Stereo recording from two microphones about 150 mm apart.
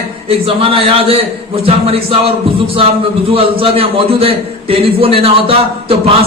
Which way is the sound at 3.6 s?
40° right (ahead or behind).